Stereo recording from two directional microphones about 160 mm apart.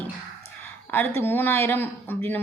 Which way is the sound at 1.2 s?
15° left (ahead or behind).